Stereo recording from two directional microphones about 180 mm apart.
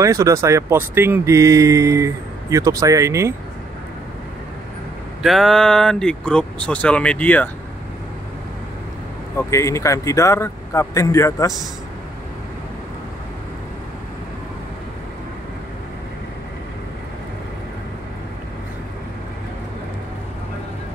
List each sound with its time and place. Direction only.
0.0 s speech: 15° right (ahead or behind)
5.2 s speech: centre (ahead or behind)
9.4 s speech: 15° left (ahead or behind)